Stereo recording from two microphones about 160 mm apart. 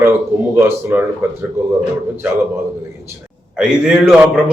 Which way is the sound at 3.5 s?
5° right (ahead or behind).